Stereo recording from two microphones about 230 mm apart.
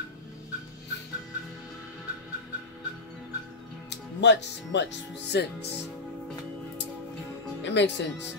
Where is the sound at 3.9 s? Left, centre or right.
Left.